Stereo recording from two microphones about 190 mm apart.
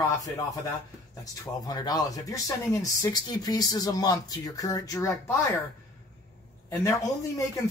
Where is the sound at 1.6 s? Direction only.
20° left (ahead or behind).